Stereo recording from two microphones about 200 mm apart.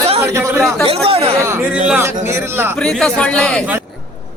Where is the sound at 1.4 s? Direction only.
10° right (ahead or behind).